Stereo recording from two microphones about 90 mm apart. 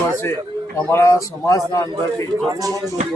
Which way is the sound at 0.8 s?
35° left (ahead or behind).